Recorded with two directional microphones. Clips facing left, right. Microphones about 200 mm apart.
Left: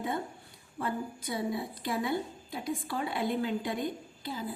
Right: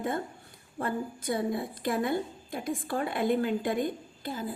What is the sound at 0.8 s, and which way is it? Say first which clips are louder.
A woman's voice: right 2 dB; 50° right (ahead or behind).